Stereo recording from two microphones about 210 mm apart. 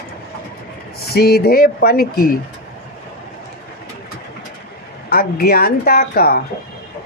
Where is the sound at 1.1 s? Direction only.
50° left (ahead or behind).